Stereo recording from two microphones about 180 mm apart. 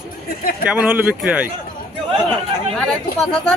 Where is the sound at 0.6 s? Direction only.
10° right (ahead or behind).